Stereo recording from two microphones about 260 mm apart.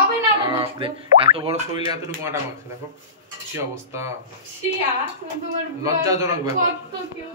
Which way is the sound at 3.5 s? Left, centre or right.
Centre.